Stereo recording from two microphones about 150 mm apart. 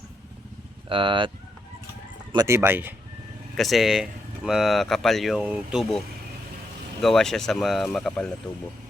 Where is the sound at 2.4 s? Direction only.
15° right (ahead or behind).